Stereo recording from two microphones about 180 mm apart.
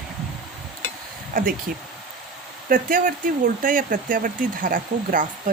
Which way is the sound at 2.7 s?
50° right (ahead or behind).